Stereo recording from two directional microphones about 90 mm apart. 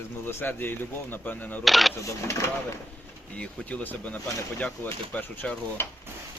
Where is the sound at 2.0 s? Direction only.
35° left (ahead or behind).